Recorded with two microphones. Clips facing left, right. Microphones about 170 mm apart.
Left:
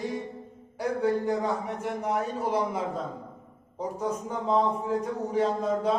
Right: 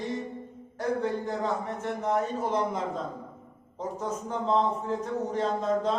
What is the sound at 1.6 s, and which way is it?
A man's voice, 10° left (ahead or behind).